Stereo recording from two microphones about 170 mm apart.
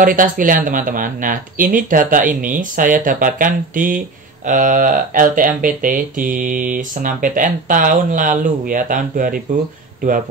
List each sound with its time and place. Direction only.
0.0 s speech: 50° right (ahead or behind)